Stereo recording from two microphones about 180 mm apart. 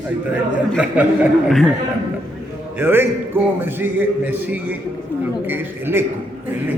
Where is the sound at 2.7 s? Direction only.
10° right (ahead or behind).